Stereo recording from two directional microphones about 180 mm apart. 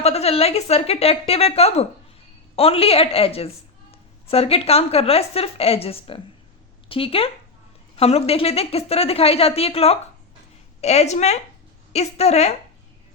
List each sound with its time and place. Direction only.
0.0 s speech: 35° left (ahead or behind)